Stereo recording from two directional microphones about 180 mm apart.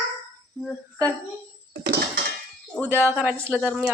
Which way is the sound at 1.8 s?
65° right (ahead or behind).